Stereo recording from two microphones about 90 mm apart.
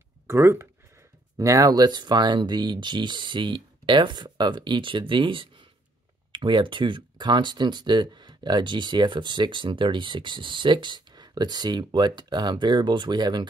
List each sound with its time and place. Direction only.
0.3 s speech: 30° right (ahead or behind)
1.4 s speech: 40° right (ahead or behind); by 13.5 s 55° right (ahead or behind)